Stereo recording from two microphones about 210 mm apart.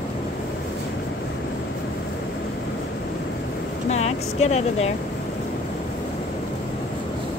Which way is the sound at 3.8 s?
30° left (ahead or behind).